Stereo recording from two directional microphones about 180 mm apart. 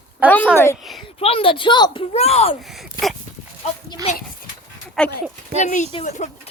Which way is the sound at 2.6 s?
Centre (ahead or behind).